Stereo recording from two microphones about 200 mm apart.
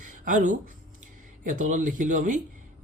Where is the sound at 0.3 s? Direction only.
40° right (ahead or behind).